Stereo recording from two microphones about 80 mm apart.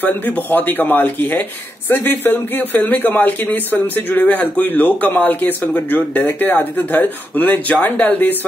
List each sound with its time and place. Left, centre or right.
0.0 s speech: left